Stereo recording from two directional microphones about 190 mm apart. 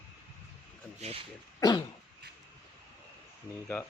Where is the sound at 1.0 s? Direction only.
30° right (ahead or behind).